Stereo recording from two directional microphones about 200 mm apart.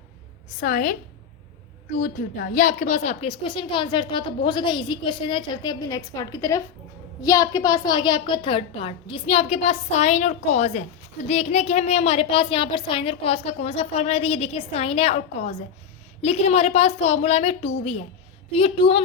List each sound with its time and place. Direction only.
0.6 s a woman's voice: 45° left (ahead or behind)
2.0 s a woman's voice: 40° left (ahead or behind)